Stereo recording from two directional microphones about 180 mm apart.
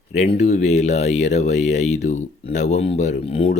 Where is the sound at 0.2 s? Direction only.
40° left (ahead or behind).